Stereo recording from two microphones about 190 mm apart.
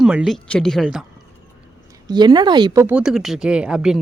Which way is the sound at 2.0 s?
20° right (ahead or behind).